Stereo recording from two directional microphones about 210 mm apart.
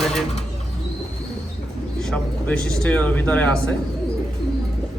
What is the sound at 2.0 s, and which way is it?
A man's voice, 5° left (ahead or behind).